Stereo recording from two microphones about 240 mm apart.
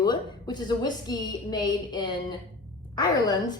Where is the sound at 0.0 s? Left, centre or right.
Centre.